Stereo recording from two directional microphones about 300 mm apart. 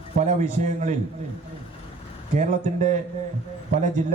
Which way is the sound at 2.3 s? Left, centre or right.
Right.